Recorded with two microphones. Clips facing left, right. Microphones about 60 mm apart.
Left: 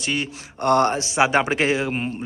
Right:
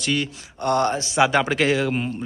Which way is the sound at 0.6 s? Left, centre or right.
Left.